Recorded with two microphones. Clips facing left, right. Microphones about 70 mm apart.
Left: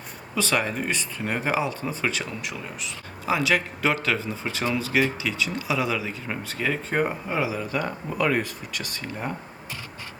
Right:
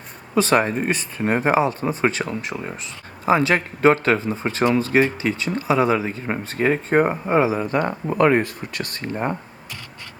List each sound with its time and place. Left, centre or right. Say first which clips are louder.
0.3 s speech: right 7 dB; right